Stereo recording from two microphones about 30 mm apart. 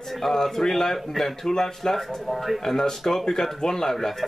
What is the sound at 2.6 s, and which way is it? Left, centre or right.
Speech, centre.